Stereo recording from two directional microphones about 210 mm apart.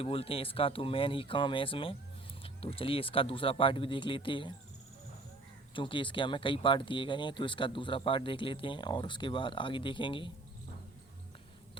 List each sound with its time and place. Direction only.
0.0 s speech: 25° left (ahead or behind)
5.7 s speech: 25° left (ahead or behind)